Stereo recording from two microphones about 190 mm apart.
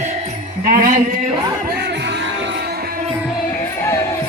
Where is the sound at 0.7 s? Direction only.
45° right (ahead or behind).